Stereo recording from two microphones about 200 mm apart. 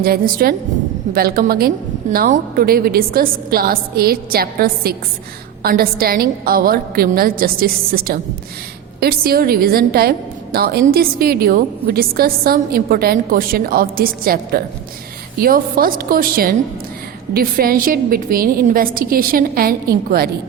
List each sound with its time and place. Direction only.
0.0 s a woman's voice: 50° right (ahead or behind)